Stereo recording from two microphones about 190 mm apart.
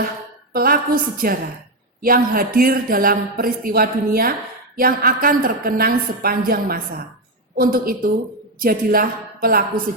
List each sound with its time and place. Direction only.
0.5 s speech: 50° right (ahead or behind)